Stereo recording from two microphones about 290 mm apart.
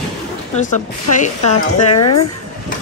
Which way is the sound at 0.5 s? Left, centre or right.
Left.